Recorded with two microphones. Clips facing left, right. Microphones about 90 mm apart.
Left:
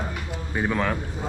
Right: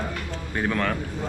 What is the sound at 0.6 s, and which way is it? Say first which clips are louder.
Speech: left 1 dB; 10° left (ahead or behind).